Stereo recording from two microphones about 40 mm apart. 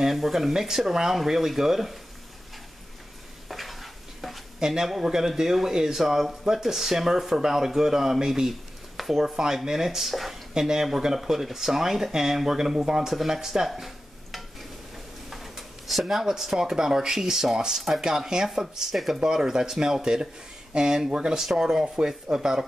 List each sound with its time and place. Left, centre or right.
0.0 s speech: centre
3.4 s stir: centre
4.6 s speech: centre
13.1 s stir: centre
15.2 s speech: centre